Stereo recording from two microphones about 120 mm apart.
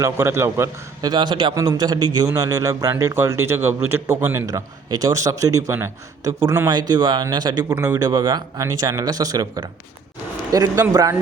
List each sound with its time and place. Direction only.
0.0 s a man's voice: 25° right (ahead or behind)
1.1 s a man's voice: 40° right (ahead or behind); by 6.3 s 20° right (ahead or behind)
6.7 s a man's voice: 35° right (ahead or behind)